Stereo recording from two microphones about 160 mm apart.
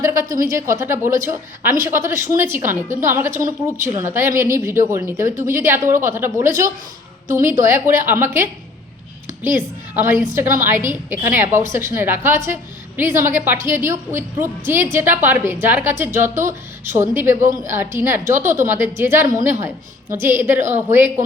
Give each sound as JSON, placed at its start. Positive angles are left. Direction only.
{"t": 0.0, "sound": "a woman's voice", "side_deg": -20}